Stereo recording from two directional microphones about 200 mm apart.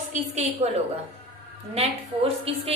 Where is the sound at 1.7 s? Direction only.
30° right (ahead or behind).